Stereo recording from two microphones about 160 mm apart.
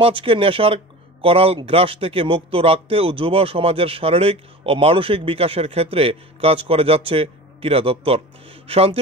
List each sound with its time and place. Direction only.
0.0 s speech: 35° right (ahead or behind)